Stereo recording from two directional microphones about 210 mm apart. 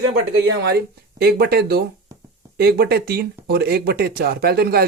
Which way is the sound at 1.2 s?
50° right (ahead or behind).